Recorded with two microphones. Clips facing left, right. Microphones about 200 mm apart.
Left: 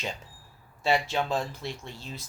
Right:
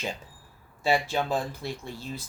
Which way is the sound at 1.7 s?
55° right (ahead or behind).